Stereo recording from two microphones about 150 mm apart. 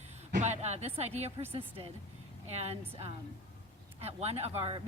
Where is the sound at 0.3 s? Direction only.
50° right (ahead or behind).